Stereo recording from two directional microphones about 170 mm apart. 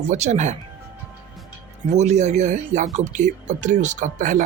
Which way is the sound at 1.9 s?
40° right (ahead or behind).